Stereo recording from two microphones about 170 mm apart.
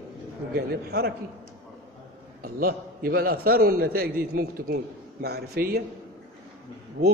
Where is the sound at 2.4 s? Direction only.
60° right (ahead or behind).